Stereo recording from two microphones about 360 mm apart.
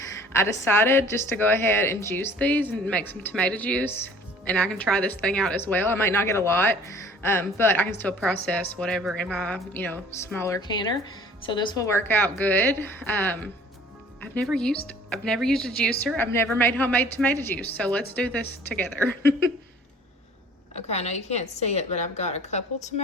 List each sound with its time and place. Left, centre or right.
0.2 s a woman's voice: centre
20.7 s a woman's voice: centre